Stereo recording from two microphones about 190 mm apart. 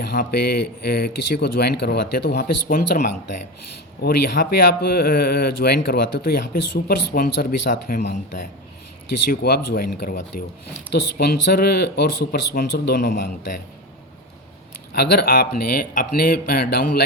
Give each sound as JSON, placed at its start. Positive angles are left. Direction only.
{"t": 0.0, "sound": "speech", "side_deg": 55}
{"t": 9.3, "sound": "speech", "side_deg": 50}
{"t": 14.9, "sound": "speech", "side_deg": 55}